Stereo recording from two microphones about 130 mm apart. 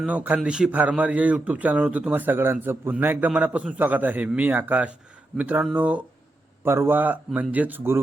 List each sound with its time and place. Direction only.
0.0 s a man's voice: 10° right (ahead or behind)